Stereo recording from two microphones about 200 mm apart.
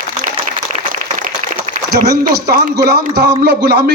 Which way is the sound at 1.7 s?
55° right (ahead or behind).